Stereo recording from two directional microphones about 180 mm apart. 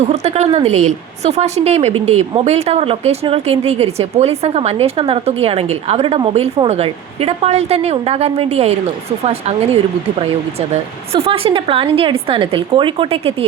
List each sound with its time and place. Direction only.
0.1 s a woman's voice: 35° right (ahead or behind)